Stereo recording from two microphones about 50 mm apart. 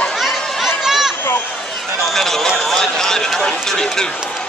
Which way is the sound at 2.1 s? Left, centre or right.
Centre.